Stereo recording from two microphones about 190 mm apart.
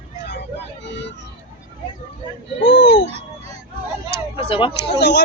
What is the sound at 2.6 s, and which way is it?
Speech, 70° left (ahead or behind).